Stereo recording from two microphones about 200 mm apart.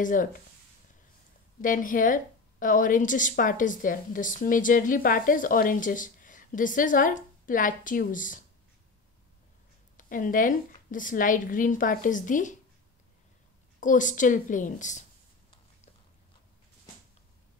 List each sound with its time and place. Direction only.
0.0 s a woman's voice: 40° left (ahead or behind)
1.6 s a woman's voice: 40° left (ahead or behind)
9.9 s a woman's voice: 40° left (ahead or behind)
13.7 s a woman's voice: 40° left (ahead or behind)